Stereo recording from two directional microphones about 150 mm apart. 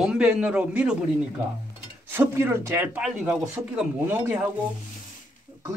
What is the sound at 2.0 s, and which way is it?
A man's voice, 15° right (ahead or behind).